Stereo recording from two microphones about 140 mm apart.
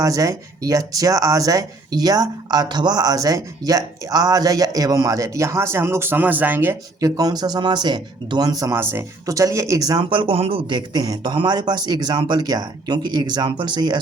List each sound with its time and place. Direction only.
0.0 s speech: 25° right (ahead or behind)
10.0 s speech: 35° right (ahead or behind)